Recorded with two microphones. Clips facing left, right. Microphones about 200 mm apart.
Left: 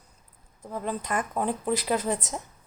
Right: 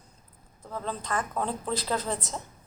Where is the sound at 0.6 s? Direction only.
15° left (ahead or behind).